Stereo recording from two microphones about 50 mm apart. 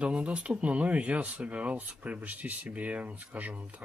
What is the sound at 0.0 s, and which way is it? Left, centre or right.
Speech, right.